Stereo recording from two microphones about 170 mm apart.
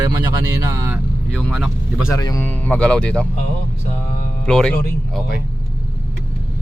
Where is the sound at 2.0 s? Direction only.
20° left (ahead or behind).